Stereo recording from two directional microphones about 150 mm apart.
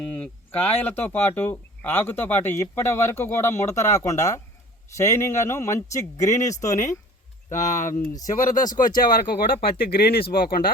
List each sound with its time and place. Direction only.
0.1 s speech: 10° left (ahead or behind)
7.5 s speech: 55° left (ahead or behind)
8.8 s speech: 30° left (ahead or behind)
9.6 s speech: 90° left